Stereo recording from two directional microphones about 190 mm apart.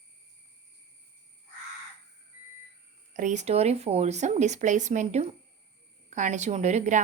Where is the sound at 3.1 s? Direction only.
40° right (ahead or behind).